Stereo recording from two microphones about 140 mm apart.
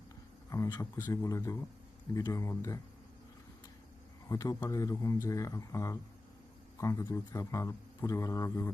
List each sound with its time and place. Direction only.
0.8 s a man's voice: 20° left (ahead or behind)
4.3 s a man's voice: 25° left (ahead or behind)